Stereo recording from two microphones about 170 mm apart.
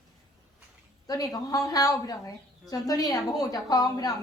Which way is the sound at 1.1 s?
20° left (ahead or behind).